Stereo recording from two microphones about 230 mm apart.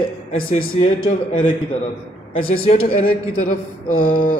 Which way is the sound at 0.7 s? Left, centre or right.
Left.